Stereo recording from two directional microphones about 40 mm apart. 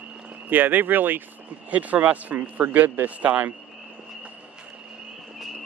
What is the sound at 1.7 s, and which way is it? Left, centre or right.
Speech, right.